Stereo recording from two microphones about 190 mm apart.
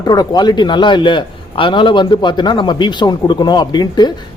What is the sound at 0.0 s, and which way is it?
A man's voice, 20° left (ahead or behind).